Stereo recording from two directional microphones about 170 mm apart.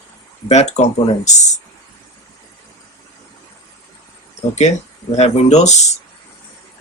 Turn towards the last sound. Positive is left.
turn(degrees=45)  # may be behind; listen again after turning